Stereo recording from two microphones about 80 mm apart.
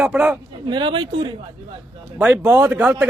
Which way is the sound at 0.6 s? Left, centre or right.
Right.